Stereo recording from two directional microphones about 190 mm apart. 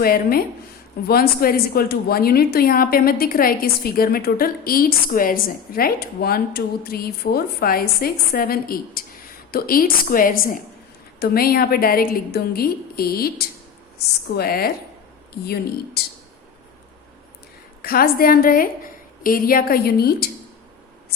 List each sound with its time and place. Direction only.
0.0 s a woman's voice: 50° left (ahead or behind)
14.3 s a woman's voice: 55° left (ahead or behind)
16.0 s speech: 55° left (ahead or behind)
17.8 s a woman's voice: 55° left (ahead or behind)